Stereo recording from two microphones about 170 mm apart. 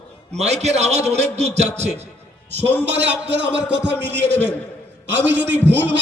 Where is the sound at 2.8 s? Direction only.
90° right.